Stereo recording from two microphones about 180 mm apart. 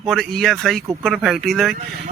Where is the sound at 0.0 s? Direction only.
Centre (ahead or behind).